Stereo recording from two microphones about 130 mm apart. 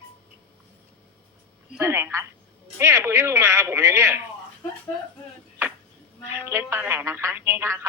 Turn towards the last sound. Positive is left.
turn(degrees=-20)  # may be behind; listen again after turning